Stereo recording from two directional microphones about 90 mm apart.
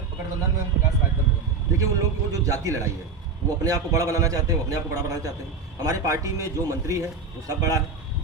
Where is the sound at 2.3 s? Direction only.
40° right (ahead or behind).